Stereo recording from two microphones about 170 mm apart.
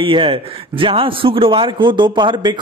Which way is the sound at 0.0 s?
30° right (ahead or behind).